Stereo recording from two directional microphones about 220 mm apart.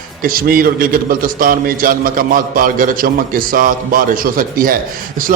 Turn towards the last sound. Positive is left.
turn(degrees=-40)  # may be behind; listen again after turning